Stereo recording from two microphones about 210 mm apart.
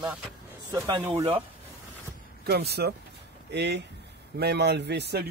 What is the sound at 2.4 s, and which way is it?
A man's voice, 50° right (ahead or behind).